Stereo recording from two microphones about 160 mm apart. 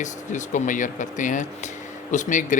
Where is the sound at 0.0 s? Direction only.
50° left (ahead or behind).